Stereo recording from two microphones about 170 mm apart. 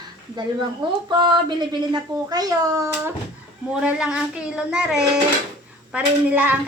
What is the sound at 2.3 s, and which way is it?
Speech, 20° right (ahead or behind).